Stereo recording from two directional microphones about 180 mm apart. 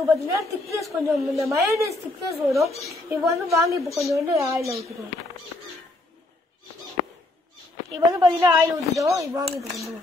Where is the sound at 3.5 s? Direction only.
15° right (ahead or behind).